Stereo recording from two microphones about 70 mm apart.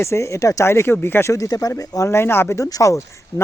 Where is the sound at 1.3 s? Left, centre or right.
Left.